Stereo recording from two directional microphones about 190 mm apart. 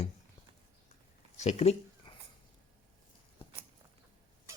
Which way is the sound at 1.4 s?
35° left (ahead or behind).